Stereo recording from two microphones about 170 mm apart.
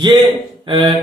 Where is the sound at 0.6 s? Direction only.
30° right (ahead or behind).